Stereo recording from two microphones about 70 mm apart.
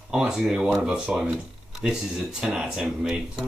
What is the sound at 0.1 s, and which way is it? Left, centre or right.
Speech, centre.